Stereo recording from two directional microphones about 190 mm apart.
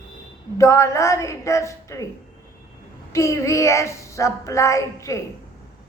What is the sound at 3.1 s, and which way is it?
Speech, 15° left (ahead or behind).